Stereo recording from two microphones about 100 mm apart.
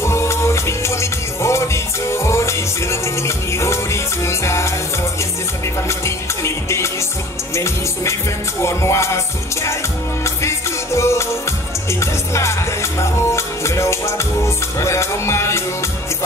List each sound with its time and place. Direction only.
0.0 s music: 25° left (ahead or behind)
5.9 s music: 30° left (ahead or behind)